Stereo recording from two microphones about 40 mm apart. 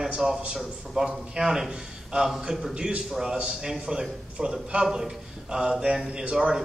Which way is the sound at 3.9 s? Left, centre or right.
Right.